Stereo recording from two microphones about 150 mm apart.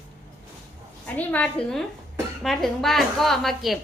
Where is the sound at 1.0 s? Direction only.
10° left (ahead or behind).